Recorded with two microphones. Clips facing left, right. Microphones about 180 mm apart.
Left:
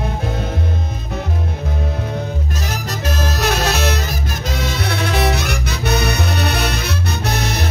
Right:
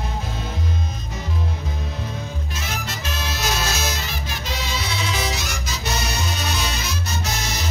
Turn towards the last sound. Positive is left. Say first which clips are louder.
# left 6 dB
turn(degrees=60)  # may be behind; listen again after turning